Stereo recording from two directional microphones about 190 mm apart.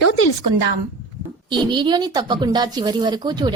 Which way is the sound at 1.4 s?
25° right (ahead or behind).